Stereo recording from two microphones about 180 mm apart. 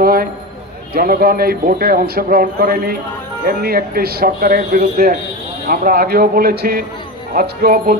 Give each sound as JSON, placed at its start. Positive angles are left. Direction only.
{"t": 0.0, "sound": "speech", "side_deg": -55}